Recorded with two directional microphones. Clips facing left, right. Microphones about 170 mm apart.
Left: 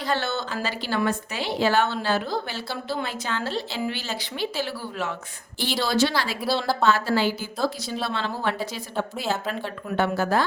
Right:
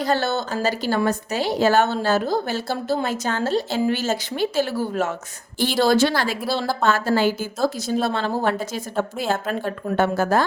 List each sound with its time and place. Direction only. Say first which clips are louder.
0.0 s a woman's voice: right 5 dB; 40° right (ahead or behind)